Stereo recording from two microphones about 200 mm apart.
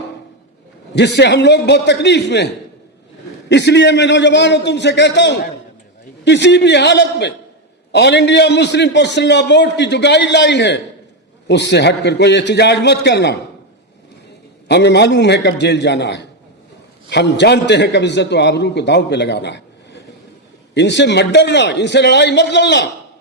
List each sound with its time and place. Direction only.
0.9 s a man's voice: 60° left (ahead or behind)
3.5 s a man's voice: 60° left (ahead or behind)
14.7 s a man's voice: 60° left (ahead or behind)